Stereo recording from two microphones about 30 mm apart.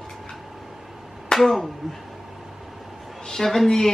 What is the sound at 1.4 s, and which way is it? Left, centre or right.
Speech, centre.